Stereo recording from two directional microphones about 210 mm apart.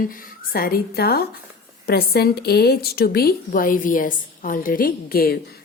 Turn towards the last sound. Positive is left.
turn(degrees=45)  # may be behind; listen again after turning